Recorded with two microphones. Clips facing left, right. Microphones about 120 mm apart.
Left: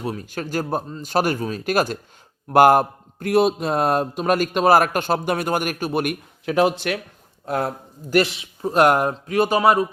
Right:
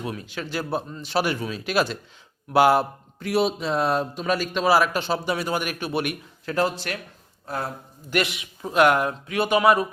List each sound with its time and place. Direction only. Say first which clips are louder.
0.0 s a man's voice: left 4 dB; 40° left (ahead or behind)
6.4 s speech: left 5 dB; 70° left (ahead or behind)
8.1 s speech: left 6 dB; 30° left (ahead or behind)